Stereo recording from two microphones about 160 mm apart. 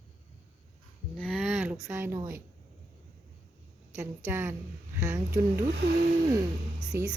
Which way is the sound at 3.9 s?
20° right (ahead or behind).